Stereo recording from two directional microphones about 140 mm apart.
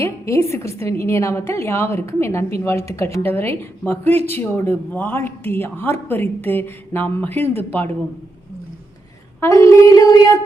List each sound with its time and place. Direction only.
0.0 s a woman's voice: 20° left (ahead or behind)
9.4 s a woman's voice: 20° left (ahead or behind)